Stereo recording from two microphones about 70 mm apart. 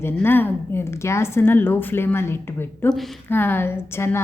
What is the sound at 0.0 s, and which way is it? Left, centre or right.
Speech, left.